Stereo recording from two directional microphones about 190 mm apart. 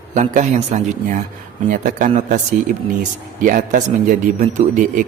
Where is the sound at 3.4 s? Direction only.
45° right (ahead or behind).